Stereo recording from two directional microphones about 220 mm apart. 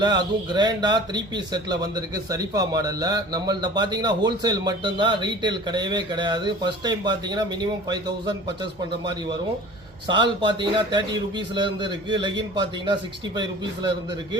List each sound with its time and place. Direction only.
0.0 s speech: 20° right (ahead or behind)
10.1 s speech: 20° right (ahead or behind)